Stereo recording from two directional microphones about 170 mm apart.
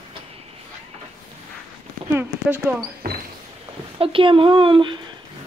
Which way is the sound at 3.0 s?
65° right (ahead or behind).